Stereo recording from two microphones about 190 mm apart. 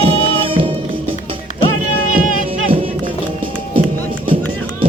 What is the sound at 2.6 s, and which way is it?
Music, 30° right (ahead or behind).